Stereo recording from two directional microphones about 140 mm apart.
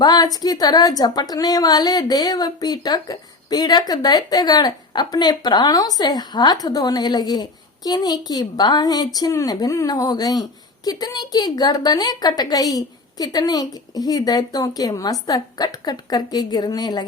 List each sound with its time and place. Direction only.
0.0 s a woman's voice: 25° left (ahead or behind)